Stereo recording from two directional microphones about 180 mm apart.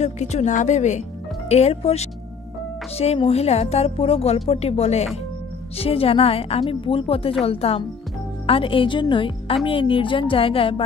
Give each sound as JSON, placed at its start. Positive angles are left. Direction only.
{"t": 0.0, "sound": "speech", "side_deg": 40}